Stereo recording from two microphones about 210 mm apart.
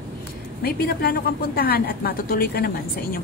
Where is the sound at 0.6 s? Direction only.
45° left (ahead or behind).